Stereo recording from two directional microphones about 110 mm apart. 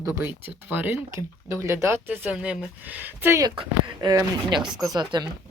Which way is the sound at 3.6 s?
40° right (ahead or behind).